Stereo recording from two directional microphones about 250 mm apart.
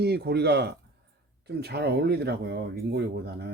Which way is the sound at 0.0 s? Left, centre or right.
Right.